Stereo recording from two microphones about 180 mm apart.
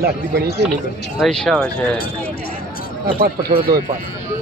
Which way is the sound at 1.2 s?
Centre (ahead or behind).